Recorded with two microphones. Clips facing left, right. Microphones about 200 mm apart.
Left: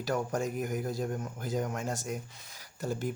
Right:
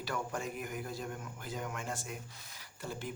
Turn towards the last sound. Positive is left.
turn(degrees=45)  # may be behind; listen again after turning